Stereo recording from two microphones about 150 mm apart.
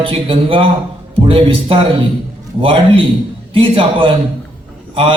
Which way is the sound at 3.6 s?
35° right (ahead or behind).